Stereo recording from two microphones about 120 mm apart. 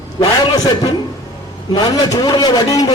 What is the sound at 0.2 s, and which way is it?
A man's voice, 35° left (ahead or behind).